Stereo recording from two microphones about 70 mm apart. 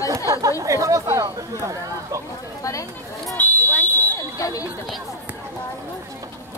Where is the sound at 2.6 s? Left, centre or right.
Left.